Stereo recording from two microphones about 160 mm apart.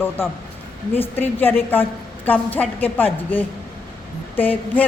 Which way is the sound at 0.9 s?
10° left (ahead or behind).